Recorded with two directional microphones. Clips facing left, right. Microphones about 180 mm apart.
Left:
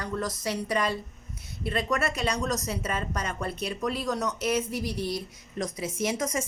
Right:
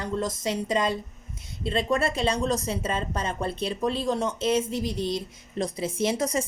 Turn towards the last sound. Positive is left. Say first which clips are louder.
# right 3 dB
turn(degrees=-35)  # may be behind; listen again after turning